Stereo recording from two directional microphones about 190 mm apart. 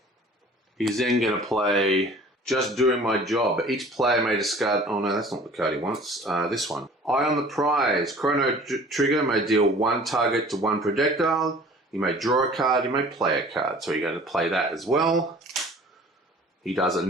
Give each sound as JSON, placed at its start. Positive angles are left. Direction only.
{"t": 0.8, "sound": "speech", "side_deg": 0}
{"t": 16.6, "sound": "speech", "side_deg": 0}